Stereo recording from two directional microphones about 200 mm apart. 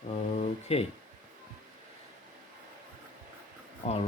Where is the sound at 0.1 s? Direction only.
30° left (ahead or behind).